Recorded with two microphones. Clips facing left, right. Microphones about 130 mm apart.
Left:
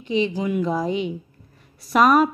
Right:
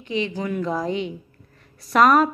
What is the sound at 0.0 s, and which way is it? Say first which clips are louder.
A woman's voice: left 3 dB; 20° left (ahead or behind).